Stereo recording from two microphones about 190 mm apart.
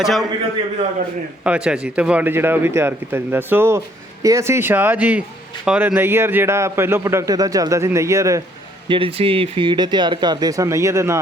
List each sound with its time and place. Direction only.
0.0 s a man's voice: centre (ahead or behind)
1.5 s a man's voice: 5° right (ahead or behind)
8.9 s speech: 30° right (ahead or behind)